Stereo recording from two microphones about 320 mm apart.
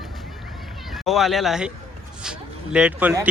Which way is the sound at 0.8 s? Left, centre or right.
Centre.